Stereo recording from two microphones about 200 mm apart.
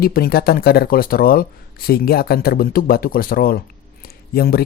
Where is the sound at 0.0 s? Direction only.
50° left (ahead or behind).